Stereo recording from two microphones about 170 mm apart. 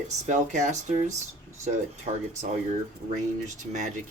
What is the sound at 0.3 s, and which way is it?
Speech, 45° right (ahead or behind).